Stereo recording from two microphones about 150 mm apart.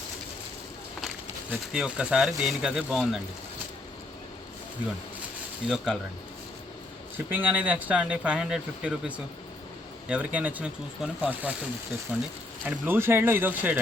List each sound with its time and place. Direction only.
1.5 s speech: 5° right (ahead or behind)
5.6 s speech: 5° right (ahead or behind)
7.3 s speech: 10° right (ahead or behind)